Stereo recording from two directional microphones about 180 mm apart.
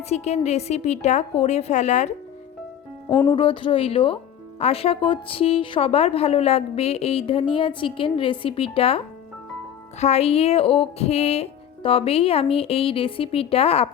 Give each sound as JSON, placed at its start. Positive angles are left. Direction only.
{"t": 0.1, "sound": "a woman's voice", "side_deg": 35}
{"t": 3.2, "sound": "a woman's voice", "side_deg": 25}